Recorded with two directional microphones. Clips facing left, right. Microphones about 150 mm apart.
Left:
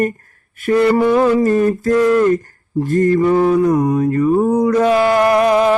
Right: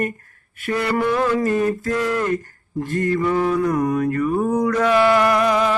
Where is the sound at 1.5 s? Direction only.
35° left (ahead or behind).